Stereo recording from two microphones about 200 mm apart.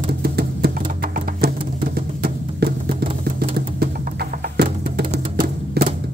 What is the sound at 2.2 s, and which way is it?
Music, 55° right (ahead or behind).